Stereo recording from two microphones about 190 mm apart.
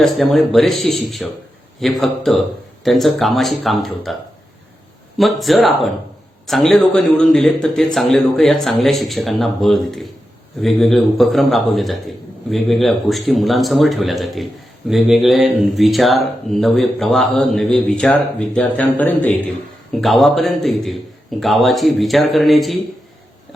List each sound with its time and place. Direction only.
0.0 s speech: centre (ahead or behind)